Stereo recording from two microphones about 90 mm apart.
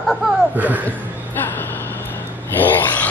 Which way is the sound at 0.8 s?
20° left (ahead or behind).